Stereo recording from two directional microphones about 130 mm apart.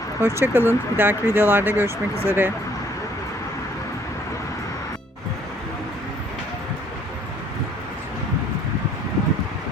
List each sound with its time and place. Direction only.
0.2 s speech: 20° right (ahead or behind)